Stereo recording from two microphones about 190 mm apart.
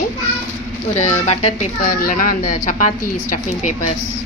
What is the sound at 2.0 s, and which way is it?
A woman's voice, 50° left (ahead or behind).